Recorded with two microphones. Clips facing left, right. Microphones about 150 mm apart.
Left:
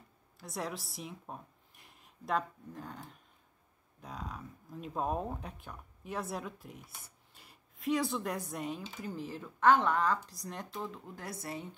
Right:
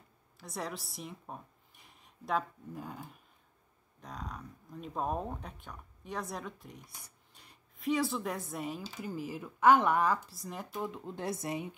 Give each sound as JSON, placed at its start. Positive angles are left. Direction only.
{"t": 0.4, "sound": "a woman's voice", "side_deg": 0}
{"t": 4.0, "sound": "speech", "side_deg": 0}
{"t": 10.8, "sound": "speech", "side_deg": -20}